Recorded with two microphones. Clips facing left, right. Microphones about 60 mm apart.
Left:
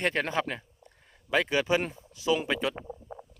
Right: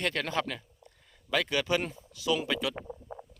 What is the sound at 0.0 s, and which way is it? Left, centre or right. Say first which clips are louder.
Speech: left 3 dB; left.